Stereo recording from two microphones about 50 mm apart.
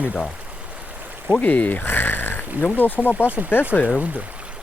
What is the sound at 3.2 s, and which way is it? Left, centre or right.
Speech, right.